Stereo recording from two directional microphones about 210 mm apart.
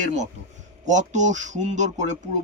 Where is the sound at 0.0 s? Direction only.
35° right (ahead or behind).